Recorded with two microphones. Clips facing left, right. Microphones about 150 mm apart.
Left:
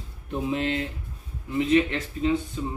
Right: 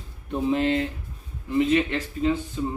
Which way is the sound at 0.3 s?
Centre (ahead or behind).